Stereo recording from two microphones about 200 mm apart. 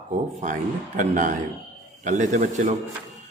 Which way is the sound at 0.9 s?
40° right (ahead or behind).